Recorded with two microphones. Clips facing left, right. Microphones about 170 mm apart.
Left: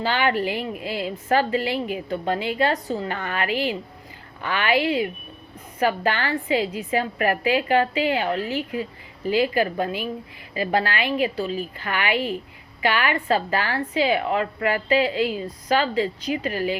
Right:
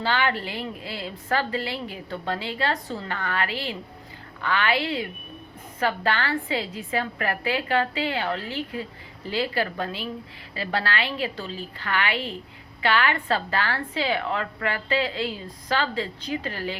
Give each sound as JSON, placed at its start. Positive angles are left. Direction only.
{"t": 0.0, "sound": "a woman's voice", "side_deg": 15}